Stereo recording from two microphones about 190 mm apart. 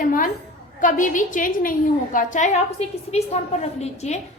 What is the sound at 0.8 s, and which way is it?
A woman's voice, 45° left (ahead or behind).